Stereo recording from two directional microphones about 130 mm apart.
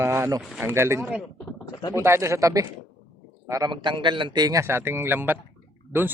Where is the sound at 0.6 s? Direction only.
20° right (ahead or behind).